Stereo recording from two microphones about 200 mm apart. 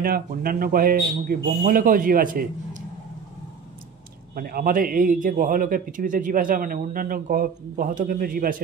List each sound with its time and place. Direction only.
0.0 s speech: 45° right (ahead or behind)
4.4 s speech: 50° right (ahead or behind)